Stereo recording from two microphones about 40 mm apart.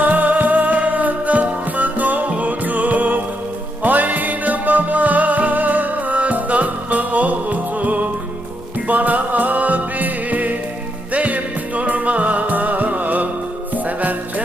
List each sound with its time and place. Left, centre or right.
0.0 s music: right